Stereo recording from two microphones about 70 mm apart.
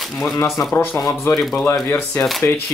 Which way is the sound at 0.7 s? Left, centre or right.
Left.